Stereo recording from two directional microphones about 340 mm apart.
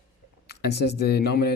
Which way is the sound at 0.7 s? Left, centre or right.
Left.